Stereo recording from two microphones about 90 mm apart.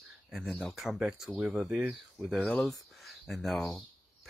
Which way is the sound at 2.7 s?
Centre (ahead or behind).